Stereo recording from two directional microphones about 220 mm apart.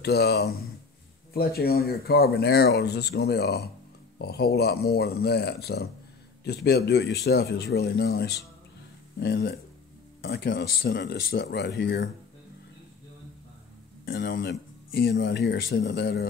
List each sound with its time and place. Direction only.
0.0 s speech: 50° left (ahead or behind)
14.0 s speech: 45° left (ahead or behind)